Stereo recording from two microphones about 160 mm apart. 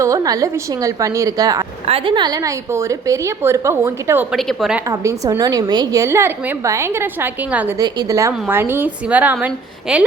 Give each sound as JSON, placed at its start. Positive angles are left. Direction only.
{"t": 0.0, "sound": "a woman's voice", "side_deg": -20}
{"t": 4.3, "sound": "a woman's voice", "side_deg": 0}
{"t": 4.9, "sound": "a woman's voice", "side_deg": -20}
{"t": 7.8, "sound": "a woman's voice", "side_deg": -20}